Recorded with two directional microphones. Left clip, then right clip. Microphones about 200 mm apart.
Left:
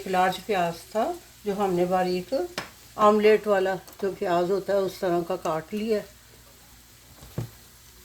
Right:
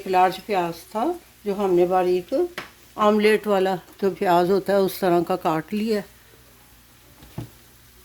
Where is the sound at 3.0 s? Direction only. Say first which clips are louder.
Even; 50° right (ahead or behind); by 6.0 s 65° right (ahead or behind).